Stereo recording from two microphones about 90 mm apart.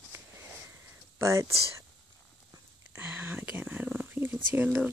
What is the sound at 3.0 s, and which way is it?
Speech, 25° right (ahead or behind).